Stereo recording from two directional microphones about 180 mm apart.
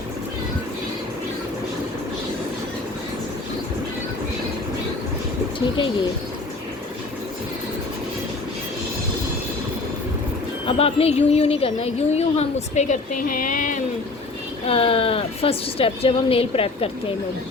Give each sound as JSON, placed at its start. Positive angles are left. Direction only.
{"t": 5.5, "sound": "speech", "side_deg": 30}
{"t": 10.7, "sound": "speech", "side_deg": 35}
{"t": 14.7, "sound": "speech", "side_deg": 30}